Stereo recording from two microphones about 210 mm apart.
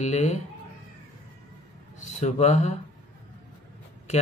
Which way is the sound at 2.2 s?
30° left (ahead or behind).